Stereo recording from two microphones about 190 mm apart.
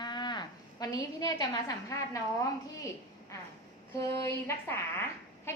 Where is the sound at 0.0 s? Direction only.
25° left (ahead or behind).